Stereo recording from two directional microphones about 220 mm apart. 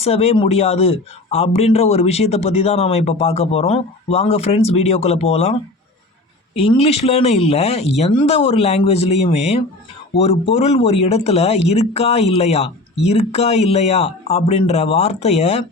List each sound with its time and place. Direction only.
0.0 s speech: 30° left (ahead or behind)
6.6 s speech: 25° left (ahead or behind)